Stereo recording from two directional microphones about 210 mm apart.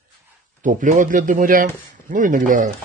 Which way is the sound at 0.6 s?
40° right (ahead or behind).